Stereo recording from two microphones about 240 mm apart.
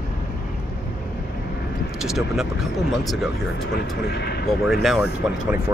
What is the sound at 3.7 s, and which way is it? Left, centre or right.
Speech, left.